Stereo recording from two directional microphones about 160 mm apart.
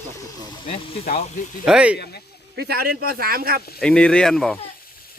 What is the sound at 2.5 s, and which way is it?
Speech, 80° right.